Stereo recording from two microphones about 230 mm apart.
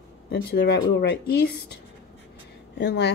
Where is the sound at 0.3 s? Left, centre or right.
Left.